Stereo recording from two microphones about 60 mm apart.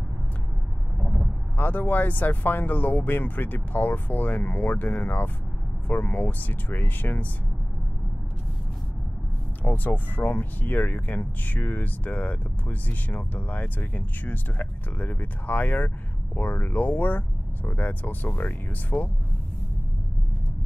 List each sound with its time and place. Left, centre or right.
1.6 s speech: left
9.6 s speech: left